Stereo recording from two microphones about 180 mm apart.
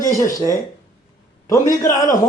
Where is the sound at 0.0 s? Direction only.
20° left (ahead or behind).